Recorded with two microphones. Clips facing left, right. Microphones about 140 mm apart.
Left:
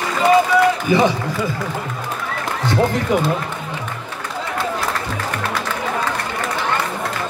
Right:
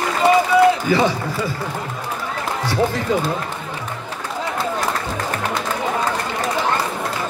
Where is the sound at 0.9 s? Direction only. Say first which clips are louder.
Left 2 dB; 20° left (ahead or behind).